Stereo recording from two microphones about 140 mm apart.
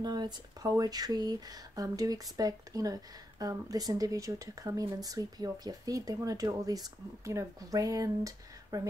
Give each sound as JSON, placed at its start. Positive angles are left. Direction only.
{"t": 0.0, "sound": "speech", "side_deg": -30}